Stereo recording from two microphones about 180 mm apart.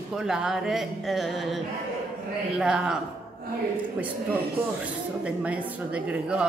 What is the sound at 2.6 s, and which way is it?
Speech, 5° right (ahead or behind).